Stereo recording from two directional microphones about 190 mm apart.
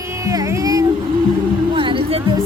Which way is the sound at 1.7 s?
25° right (ahead or behind).